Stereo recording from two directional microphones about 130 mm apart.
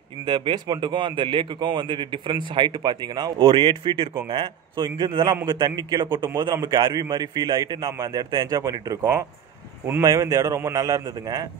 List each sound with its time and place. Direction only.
0.2 s a man's voice: 40° right (ahead or behind); by 11.4 s 25° right (ahead or behind)